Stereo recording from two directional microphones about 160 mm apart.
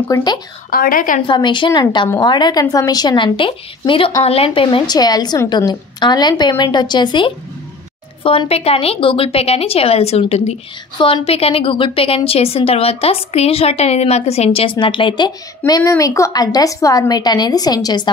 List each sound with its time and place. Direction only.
0.1 s a woman's voice: 25° left (ahead or behind)
0.7 s a woman's voice: 65° left (ahead or behind)
1.2 s a woman's voice: 30° left (ahead or behind)